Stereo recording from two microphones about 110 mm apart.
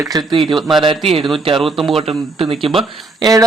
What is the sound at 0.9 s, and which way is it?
Speech, 50° right (ahead or behind).